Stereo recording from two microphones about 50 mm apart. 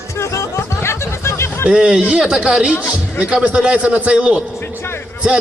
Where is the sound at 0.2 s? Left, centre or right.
Left.